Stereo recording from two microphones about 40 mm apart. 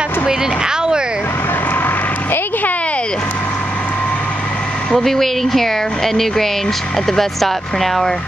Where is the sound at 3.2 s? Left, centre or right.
Left.